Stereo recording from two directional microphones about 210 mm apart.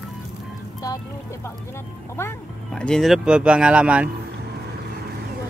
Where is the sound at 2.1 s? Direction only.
10° left (ahead or behind).